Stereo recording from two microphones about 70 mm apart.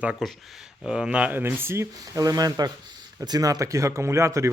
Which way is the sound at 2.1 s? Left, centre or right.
Right.